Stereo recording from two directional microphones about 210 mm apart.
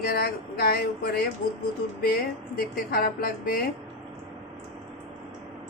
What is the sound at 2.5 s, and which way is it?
Speech, 45° left (ahead or behind).